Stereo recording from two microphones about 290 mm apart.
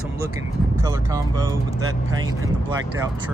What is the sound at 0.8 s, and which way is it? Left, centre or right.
Speech, centre.